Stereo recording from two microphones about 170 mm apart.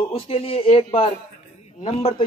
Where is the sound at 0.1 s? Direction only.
35° left (ahead or behind).